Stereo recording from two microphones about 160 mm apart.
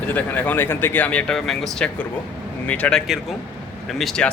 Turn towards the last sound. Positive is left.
turn(degrees=0)  # may be behind; listen again after turning